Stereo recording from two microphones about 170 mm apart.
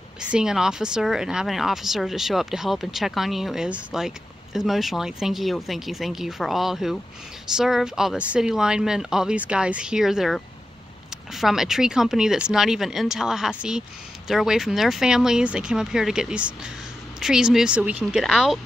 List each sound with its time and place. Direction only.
0.2 s speech: 5° right (ahead or behind)